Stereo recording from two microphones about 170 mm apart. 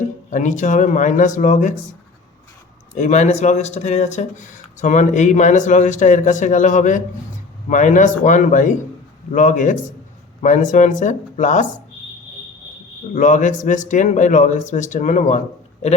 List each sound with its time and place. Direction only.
0.3 s speech: 45° left (ahead or behind)
2.9 s speech: 45° left (ahead or behind)
13.1 s speech: 50° left (ahead or behind)